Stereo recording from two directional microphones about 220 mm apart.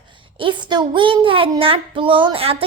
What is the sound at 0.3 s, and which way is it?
A child's voice, 20° right (ahead or behind).